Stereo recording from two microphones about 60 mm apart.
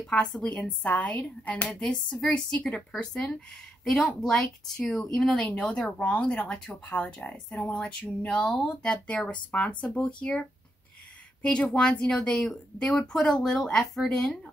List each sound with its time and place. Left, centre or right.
0.0 s speech: centre
0.4 s speech: left
1.7 s speech: centre
4.4 s speech: centre
11.4 s speech: centre